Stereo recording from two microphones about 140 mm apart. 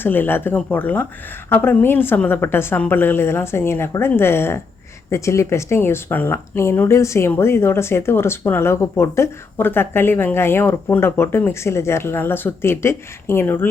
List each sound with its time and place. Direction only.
0.0 s speech: 15° left (ahead or behind)